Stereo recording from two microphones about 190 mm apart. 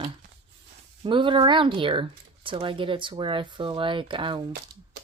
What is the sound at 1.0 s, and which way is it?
Speech, 25° right (ahead or behind).